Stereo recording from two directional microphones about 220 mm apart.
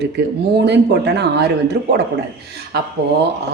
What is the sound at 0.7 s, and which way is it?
Speech, 50° right (ahead or behind).